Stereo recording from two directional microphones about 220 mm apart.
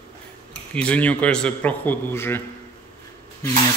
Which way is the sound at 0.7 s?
5° left (ahead or behind).